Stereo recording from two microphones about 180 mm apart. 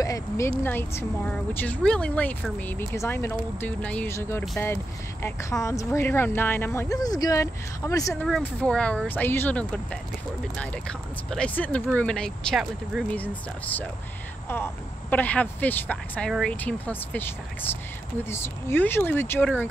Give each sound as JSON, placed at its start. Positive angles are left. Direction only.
{"t": 0.0, "sound": "speech", "side_deg": 20}
{"t": 8.3, "sound": "speech", "side_deg": 5}